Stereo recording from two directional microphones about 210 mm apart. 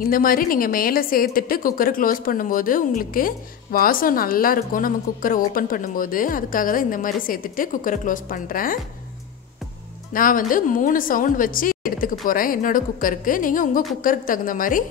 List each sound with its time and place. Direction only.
0.0 s a woman's voice: 40° left (ahead or behind)
10.1 s a woman's voice: 40° left (ahead or behind)